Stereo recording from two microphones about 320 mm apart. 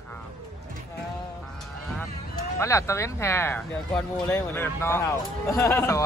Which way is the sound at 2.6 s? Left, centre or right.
Centre.